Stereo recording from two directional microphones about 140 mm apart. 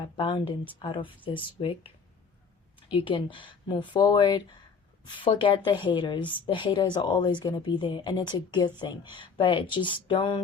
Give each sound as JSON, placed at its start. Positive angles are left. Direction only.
{"t": 0.0, "sound": "a woman's voice", "side_deg": 35}
{"t": 2.9, "sound": "a woman's voice", "side_deg": 35}